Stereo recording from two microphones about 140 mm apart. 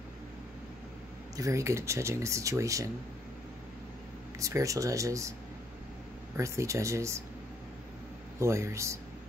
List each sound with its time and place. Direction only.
1.3 s speech: 20° right (ahead or behind)
4.4 s speech: 25° right (ahead or behind)
6.3 s speech: 20° right (ahead or behind)
8.4 s speech: 20° right (ahead or behind)